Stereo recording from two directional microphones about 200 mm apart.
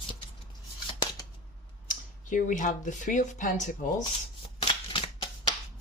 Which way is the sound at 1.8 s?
40° left (ahead or behind).